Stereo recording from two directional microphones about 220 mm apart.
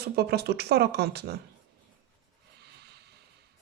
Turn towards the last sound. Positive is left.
turn(degrees=-50)  # may be behind; listen again after turning